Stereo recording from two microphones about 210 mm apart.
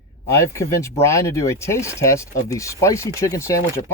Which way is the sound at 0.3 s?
15° left (ahead or behind).